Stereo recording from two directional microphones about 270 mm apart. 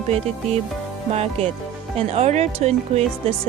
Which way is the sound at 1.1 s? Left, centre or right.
Right.